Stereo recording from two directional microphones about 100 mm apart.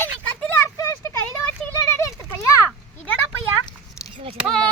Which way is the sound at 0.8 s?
30° left (ahead or behind).